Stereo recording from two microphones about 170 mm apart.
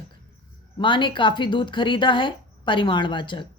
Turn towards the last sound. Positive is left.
turn(degrees=25)  # may be behind; listen again after turning